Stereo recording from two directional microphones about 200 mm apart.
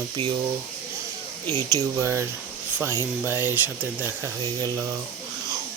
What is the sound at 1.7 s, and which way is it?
Mantra, 15° right (ahead or behind).